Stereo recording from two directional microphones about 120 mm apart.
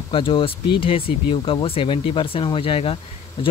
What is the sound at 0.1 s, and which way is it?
Speech, 45° left (ahead or behind).